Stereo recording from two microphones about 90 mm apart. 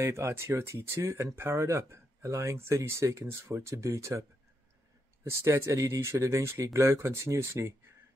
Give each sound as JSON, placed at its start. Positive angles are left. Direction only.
{"t": 0.0, "sound": "speech", "side_deg": -30}